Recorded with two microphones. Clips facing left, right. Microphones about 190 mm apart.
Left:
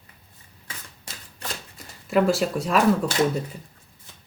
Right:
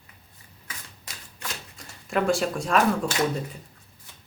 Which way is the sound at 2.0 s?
Centre (ahead or behind).